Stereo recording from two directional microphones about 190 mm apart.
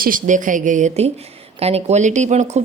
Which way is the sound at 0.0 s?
45° right (ahead or behind).